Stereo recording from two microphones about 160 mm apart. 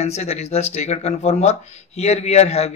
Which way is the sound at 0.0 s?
45° left (ahead or behind).